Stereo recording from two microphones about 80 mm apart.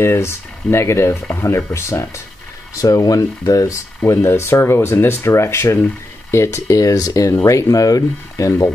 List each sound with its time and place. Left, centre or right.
0.0 s speech: left
4.0 s speech: left